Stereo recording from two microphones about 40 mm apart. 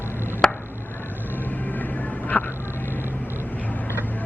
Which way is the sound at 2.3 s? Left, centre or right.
Left.